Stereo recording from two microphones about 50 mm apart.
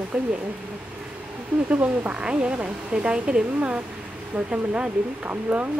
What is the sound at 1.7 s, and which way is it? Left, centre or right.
Speech, right.